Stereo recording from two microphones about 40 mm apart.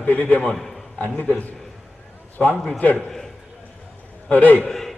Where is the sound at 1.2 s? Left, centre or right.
Left.